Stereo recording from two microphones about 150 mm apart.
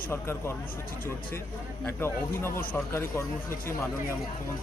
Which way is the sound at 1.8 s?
15° left (ahead or behind).